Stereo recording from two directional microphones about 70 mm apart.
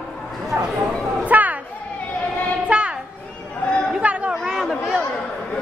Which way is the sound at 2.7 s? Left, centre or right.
Centre.